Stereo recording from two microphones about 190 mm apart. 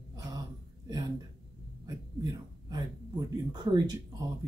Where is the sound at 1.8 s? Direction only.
20° right (ahead or behind).